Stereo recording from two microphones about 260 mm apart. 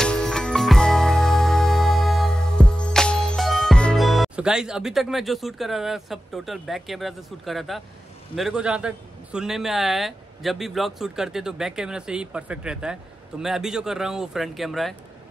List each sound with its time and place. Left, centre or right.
0.0 s music: centre
8.4 s a man's voice: centre